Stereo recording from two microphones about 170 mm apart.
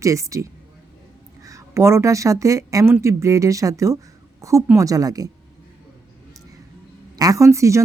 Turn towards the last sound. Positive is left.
turn(degrees=-15)  # may be behind; listen again after turning